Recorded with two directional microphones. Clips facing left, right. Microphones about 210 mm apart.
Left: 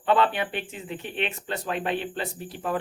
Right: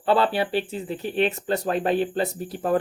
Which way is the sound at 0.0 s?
35° right (ahead or behind).